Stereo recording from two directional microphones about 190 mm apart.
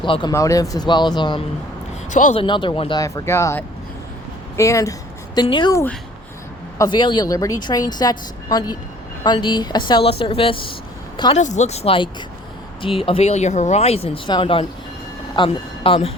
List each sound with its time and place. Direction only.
0.0 s a woman's voice: 25° left (ahead or behind)
2.0 s speech: 40° left (ahead or behind)
2.4 s a woman's voice: 25° left (ahead or behind)
3.0 s a woman's voice: 15° left (ahead or behind)
11.3 s a woman's voice: 40° left (ahead or behind)